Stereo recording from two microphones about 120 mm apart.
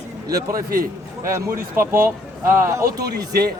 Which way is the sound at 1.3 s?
25° right (ahead or behind).